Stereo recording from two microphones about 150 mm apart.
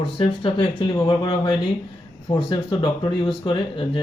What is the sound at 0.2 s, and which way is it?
Speech, 35° left (ahead or behind).